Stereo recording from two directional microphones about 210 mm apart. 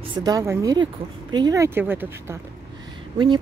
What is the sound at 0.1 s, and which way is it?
Speech, 20° right (ahead or behind).